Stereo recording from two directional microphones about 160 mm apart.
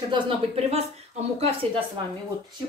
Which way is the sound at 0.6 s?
40° right (ahead or behind).